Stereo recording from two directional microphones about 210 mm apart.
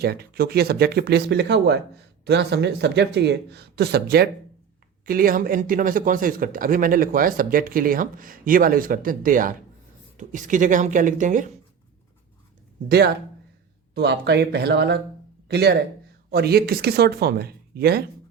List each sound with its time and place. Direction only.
0.0 s speech: 45° right (ahead or behind)
13.9 s speech: 50° right (ahead or behind)